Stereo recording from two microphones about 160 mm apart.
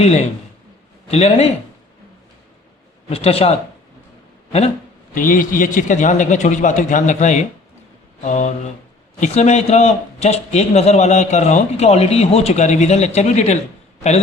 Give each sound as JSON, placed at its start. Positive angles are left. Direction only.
{"t": 0.0, "sound": "a man's voice", "side_deg": 40}
{"t": 3.1, "sound": "speech", "side_deg": 40}
{"t": 5.1, "sound": "a man's voice", "side_deg": 55}